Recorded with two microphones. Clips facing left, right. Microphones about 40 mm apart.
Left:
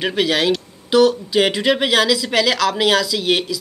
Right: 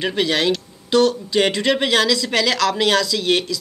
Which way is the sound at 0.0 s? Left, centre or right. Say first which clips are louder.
Left 1 dB; centre.